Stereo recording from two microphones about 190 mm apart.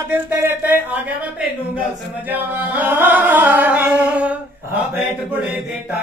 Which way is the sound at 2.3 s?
10° right (ahead or behind).